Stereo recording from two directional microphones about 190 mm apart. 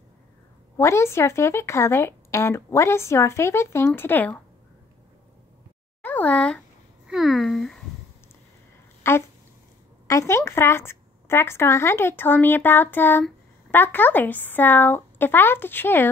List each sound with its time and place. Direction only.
0.7 s a woman's voice: 15° left (ahead or behind)
6.0 s speech: 10° left (ahead or behind)
9.0 s a woman's voice: 15° left (ahead or behind)